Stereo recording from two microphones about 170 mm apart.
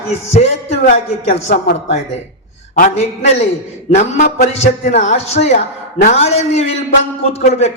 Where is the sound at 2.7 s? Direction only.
45° left (ahead or behind).